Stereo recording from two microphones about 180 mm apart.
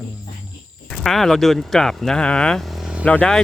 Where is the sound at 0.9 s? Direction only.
Centre (ahead or behind).